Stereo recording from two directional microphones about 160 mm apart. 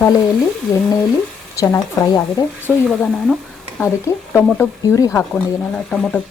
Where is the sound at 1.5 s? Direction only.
20° left (ahead or behind).